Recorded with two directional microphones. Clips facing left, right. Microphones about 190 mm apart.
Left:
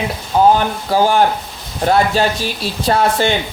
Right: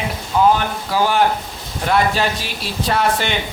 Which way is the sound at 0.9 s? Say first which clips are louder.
Left 4 dB; 45° left (ahead or behind).